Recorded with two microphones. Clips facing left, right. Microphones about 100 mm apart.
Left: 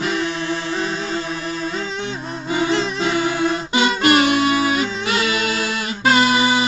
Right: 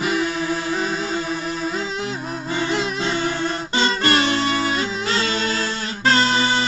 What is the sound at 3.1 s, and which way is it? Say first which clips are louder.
Music: left 4 dB; 15° left (ahead or behind).